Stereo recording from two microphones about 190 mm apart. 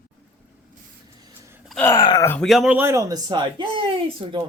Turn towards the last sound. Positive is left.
turn(degrees=-30)  # may be behind; listen again after turning